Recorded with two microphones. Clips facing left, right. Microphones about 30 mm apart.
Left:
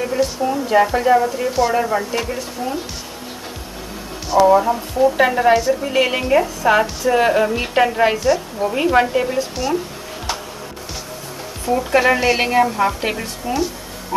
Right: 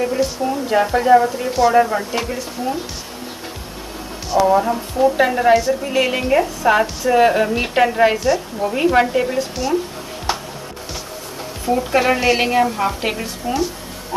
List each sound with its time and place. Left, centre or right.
0.0 s a woman's voice: centre
4.5 s a woman's voice: centre
11.7 s a woman's voice: centre